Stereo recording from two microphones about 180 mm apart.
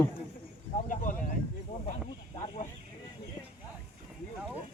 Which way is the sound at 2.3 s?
35° left (ahead or behind).